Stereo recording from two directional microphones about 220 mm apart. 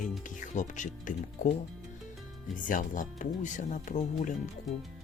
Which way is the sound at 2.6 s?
35° left (ahead or behind).